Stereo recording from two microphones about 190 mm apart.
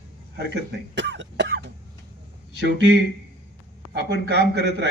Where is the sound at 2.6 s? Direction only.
65° right (ahead or behind).